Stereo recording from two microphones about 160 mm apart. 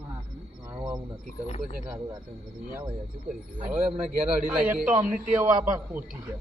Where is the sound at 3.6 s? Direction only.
10° right (ahead or behind).